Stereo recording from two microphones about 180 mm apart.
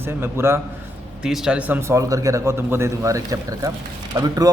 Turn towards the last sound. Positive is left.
turn(degrees=-20)  # may be behind; listen again after turning